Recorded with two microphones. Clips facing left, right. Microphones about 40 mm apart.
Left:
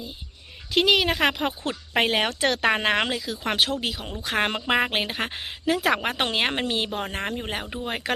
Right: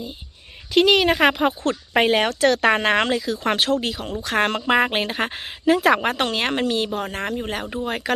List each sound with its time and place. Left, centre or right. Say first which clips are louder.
0.7 s a woman's voice: right 4 dB; centre
2.0 s a woman's voice: right 4 dB; centre
4.6 s a woman's voice: right 4 dB; centre
6.1 s speech: right 2 dB; centre